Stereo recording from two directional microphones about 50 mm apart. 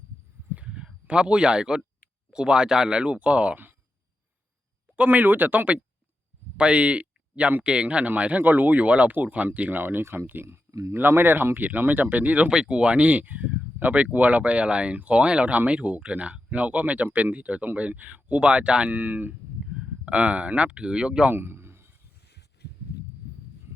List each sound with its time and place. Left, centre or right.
1.0 s speech: centre
5.0 s speech: right
10.0 s speech: right
10.4 s speech: right
11.2 s speech: right
12.5 s speech: centre
18.9 s speech: right
19.6 s a sound: centre
20.5 s speech: right
21.3 s a sound: right